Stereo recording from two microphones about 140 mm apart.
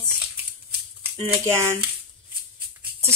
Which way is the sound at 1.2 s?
20° right (ahead or behind).